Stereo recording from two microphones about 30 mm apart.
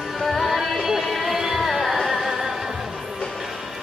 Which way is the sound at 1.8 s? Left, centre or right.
Centre.